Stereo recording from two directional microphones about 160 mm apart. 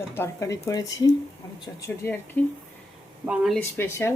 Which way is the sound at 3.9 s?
15° left (ahead or behind).